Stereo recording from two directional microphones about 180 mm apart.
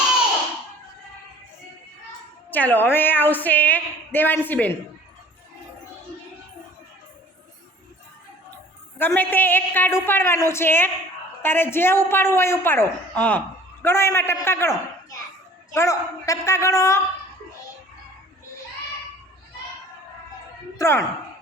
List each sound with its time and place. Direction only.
2.5 s a woman's voice: 10° left (ahead or behind)
9.0 s a woman's voice: 10° left (ahead or behind)
15.7 s a woman's voice: 15° left (ahead or behind)
20.7 s speech: 15° left (ahead or behind)